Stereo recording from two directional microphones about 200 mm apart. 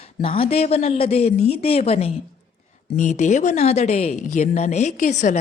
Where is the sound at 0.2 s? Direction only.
30° left (ahead or behind).